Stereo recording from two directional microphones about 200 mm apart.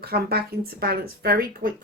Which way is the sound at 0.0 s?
50° right (ahead or behind).